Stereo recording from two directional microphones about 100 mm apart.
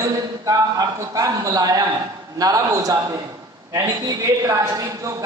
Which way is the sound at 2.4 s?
35° right (ahead or behind).